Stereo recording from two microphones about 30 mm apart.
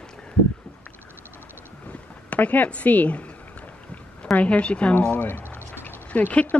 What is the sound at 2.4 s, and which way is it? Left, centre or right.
Speech, left.